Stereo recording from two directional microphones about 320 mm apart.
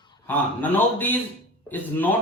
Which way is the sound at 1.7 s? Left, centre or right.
Centre.